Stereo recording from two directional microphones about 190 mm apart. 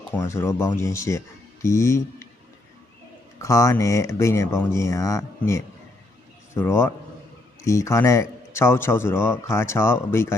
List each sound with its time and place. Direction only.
0.1 s a man's voice: 15° left (ahead or behind)
3.3 s a man's voice: 15° left (ahead or behind)